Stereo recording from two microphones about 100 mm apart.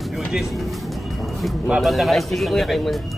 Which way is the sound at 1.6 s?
5° right (ahead or behind).